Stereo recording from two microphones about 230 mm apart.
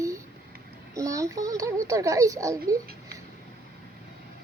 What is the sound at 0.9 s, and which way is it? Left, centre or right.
A child's voice, centre.